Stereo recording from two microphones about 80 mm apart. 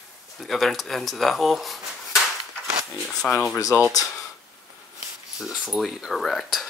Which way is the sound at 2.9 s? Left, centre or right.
Centre.